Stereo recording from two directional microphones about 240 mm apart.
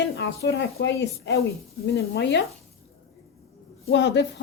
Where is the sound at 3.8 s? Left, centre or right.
Left.